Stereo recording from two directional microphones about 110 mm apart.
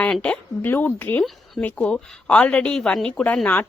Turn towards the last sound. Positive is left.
turn(degrees=10)  # may be behind; listen again after turning